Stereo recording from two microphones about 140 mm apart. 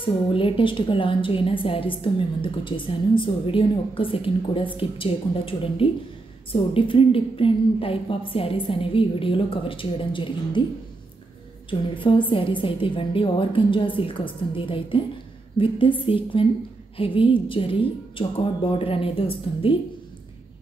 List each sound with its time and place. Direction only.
0.0 s a woman's voice: 40° left (ahead or behind)
11.9 s a woman's voice: 35° left (ahead or behind)